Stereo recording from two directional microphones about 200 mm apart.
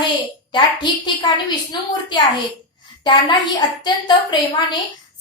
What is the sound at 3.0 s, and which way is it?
A woman's voice, 25° left (ahead or behind).